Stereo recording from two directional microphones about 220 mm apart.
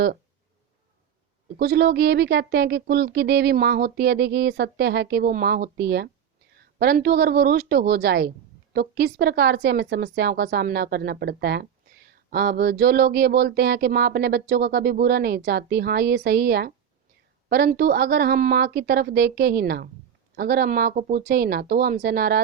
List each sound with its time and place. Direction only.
1.5 s speech: 45° right (ahead or behind)